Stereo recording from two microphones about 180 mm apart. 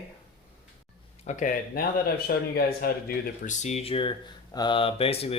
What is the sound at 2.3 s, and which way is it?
Speech, 55° left (ahead or behind).